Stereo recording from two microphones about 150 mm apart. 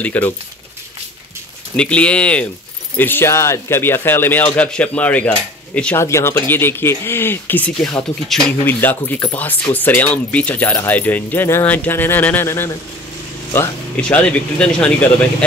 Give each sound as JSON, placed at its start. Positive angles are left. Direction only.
{"t": 0.0, "sound": "speech", "side_deg": 10}
{"t": 1.8, "sound": "speech", "side_deg": 10}